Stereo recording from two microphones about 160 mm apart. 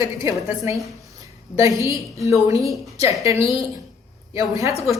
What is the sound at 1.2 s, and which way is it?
Speech, 20° right (ahead or behind).